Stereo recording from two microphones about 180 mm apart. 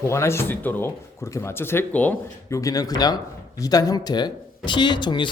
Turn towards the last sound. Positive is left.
turn(degrees=25)  # may be behind; listen again after turning